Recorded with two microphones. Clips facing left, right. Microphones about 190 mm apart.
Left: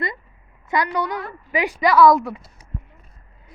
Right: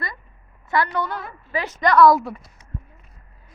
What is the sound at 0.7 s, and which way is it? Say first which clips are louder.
A woman's voice: even; 15° left (ahead or behind).